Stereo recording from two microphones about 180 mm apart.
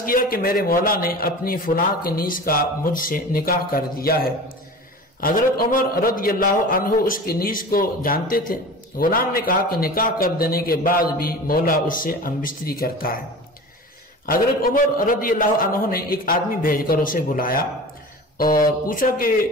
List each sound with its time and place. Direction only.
0.0 s a man's voice: 55° left (ahead or behind)
14.2 s a man's voice: 50° left (ahead or behind)